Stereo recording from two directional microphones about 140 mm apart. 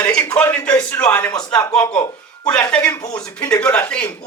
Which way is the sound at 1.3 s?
30° left (ahead or behind).